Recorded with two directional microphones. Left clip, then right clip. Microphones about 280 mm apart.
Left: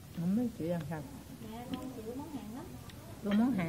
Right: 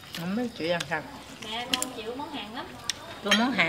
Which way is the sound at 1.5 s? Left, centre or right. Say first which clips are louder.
Right 14 dB; centre.